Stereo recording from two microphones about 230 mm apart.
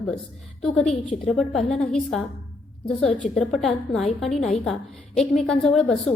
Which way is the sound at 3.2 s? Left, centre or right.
Centre.